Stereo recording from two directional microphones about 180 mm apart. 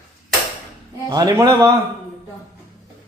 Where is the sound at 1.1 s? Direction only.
20° right (ahead or behind).